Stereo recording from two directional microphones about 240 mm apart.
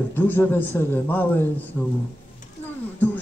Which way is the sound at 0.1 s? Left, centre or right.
Centre.